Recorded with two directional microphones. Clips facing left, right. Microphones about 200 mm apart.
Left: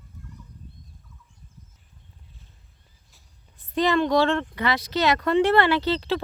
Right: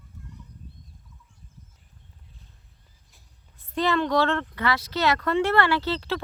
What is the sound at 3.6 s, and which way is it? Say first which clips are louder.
A child's voice: left 3 dB; 15° left (ahead or behind).